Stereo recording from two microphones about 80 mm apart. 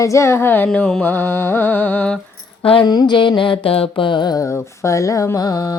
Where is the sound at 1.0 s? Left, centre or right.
Left.